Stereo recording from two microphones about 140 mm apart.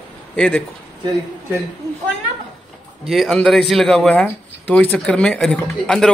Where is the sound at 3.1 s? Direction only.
Centre (ahead or behind).